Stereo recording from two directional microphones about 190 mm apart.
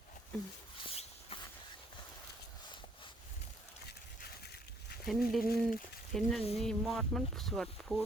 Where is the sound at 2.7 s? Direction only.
25° left (ahead or behind).